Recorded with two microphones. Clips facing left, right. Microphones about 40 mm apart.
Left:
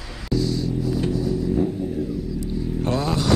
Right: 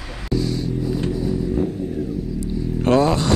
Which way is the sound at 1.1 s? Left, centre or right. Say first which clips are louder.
Right 1 dB; centre.